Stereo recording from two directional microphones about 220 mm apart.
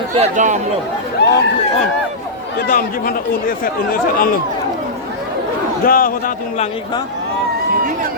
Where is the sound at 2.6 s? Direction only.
40° left (ahead or behind).